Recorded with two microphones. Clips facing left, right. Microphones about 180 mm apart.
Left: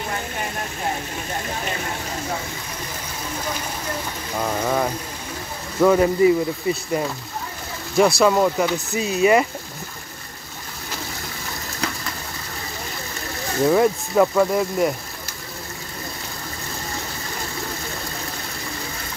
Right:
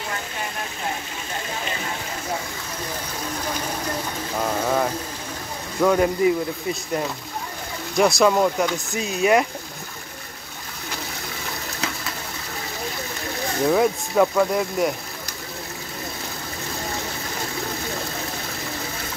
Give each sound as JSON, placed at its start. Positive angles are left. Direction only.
{"t": 4.6, "sound": "speech", "side_deg": 0}
{"t": 13.7, "sound": "speech", "side_deg": 0}